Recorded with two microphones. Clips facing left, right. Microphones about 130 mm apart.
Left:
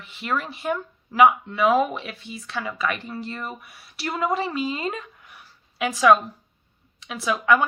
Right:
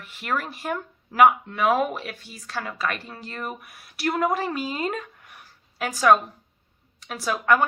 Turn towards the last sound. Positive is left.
turn(degrees=-45)  # may be behind; listen again after turning